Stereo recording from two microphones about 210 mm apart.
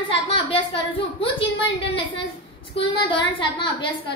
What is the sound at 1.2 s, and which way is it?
Speech, 25° left (ahead or behind).